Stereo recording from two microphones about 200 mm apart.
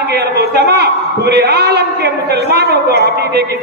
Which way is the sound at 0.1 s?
55° right (ahead or behind).